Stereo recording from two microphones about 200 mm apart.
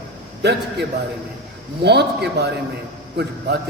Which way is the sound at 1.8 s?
55° right (ahead or behind).